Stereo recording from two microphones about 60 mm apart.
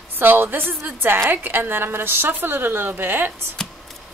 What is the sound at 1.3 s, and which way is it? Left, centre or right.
A woman's voice, right.